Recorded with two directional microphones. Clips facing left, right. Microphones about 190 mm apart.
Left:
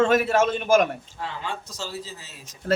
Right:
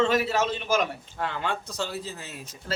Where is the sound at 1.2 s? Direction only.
60° right (ahead or behind).